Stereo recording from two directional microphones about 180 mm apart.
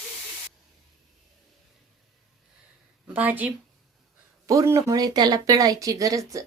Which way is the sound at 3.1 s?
10° right (ahead or behind).